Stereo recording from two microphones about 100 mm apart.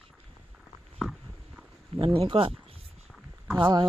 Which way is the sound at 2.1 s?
60° right (ahead or behind).